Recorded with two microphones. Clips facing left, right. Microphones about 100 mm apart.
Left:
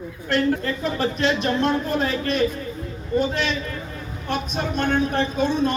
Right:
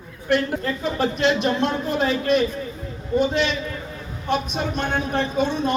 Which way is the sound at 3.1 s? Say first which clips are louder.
Right 1 dB; 10° right (ahead or behind).